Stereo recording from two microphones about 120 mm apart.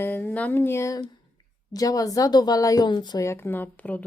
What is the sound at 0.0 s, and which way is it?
Speech, 15° left (ahead or behind).